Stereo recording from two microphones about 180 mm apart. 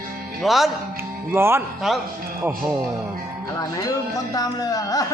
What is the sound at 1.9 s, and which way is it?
Speech, centre (ahead or behind).